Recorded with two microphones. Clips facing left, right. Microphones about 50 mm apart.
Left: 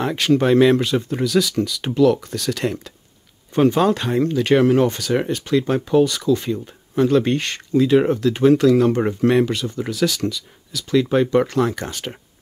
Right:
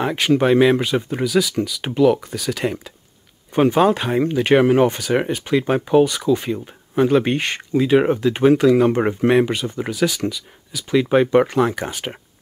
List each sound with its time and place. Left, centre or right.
0.0 s speech: centre